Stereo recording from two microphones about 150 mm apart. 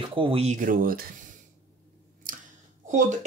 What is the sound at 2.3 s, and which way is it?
Chewing, 65° right (ahead or behind).